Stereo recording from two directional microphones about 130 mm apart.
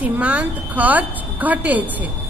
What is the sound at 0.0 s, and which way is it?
A woman's voice, 10° right (ahead or behind).